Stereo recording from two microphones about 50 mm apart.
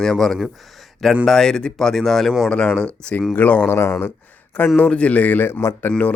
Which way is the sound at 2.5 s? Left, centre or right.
Centre.